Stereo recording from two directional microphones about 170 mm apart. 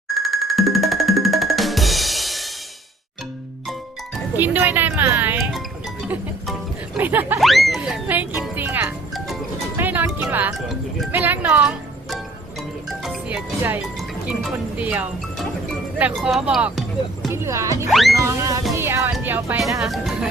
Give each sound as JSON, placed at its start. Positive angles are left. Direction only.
{"t": 0.2, "sound": "drum", "side_deg": 0}
{"t": 4.4, "sound": "music", "side_deg": -10}
{"t": 7.3, "sound": "speech", "side_deg": 0}
{"t": 9.7, "sound": "music", "side_deg": -10}
{"t": 11.1, "sound": "speech", "side_deg": -10}
{"t": 17.3, "sound": "speech", "side_deg": -15}
{"t": 18.2, "sound": "music", "side_deg": -20}
{"t": 19.2, "sound": "speech", "side_deg": -10}